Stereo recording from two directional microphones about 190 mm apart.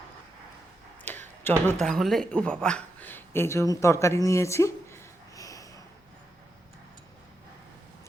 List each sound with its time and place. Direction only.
1.1 s tick-tock: 10° left (ahead or behind)
1.5 s speech: 5° left (ahead or behind)
5.4 s a sound: 15° left (ahead or behind)